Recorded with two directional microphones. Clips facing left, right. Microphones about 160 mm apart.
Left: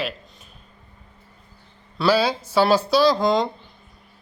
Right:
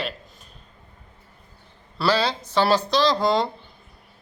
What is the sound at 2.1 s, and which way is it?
Speech, 10° left (ahead or behind).